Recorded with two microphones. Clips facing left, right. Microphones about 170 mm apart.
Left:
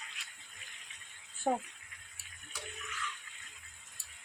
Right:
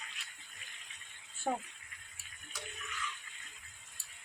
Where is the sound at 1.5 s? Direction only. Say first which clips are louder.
Left 4 dB; 20° left (ahead or behind).